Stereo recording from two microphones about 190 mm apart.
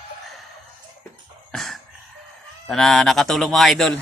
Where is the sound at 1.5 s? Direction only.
Centre (ahead or behind).